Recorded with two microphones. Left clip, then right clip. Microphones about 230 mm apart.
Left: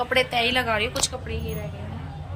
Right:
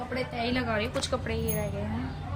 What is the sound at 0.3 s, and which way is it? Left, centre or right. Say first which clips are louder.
Speech: left 7 dB; centre.